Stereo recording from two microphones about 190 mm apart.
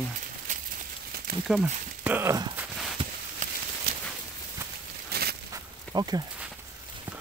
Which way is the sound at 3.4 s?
45° right (ahead or behind).